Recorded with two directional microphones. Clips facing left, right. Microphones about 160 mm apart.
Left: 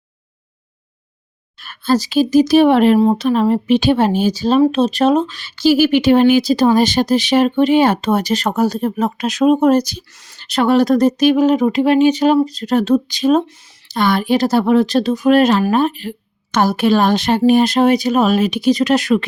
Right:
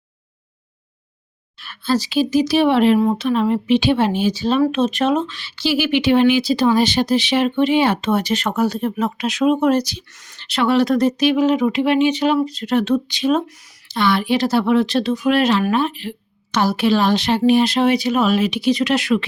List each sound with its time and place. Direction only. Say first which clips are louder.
1.5 s speech: left 4 dB; 45° left (ahead or behind)
3.0 s speech: left 4 dB; 35° left (ahead or behind)
10.2 s speech: left 3 dB; 35° left (ahead or behind)